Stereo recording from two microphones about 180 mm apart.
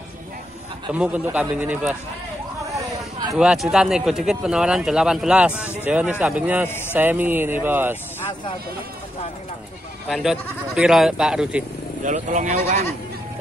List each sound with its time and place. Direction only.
0.9 s speech: 5° right (ahead or behind)
2.7 s a sound: 20° right (ahead or behind)
3.3 s speech: 5° right (ahead or behind)
10.0 s speech: centre (ahead or behind)
12.0 s speech: 40° right (ahead or behind)